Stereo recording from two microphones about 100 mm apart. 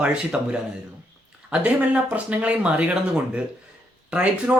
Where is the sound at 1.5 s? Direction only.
10° right (ahead or behind).